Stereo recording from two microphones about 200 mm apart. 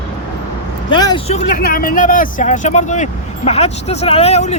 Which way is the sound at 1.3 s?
40° left (ahead or behind).